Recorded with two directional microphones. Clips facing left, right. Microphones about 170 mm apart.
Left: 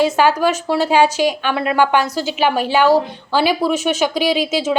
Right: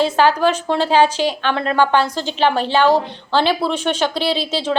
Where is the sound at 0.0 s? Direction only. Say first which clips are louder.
Even; 10° left (ahead or behind).